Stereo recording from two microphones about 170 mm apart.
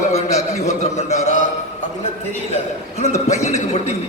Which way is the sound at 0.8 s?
45° left (ahead or behind).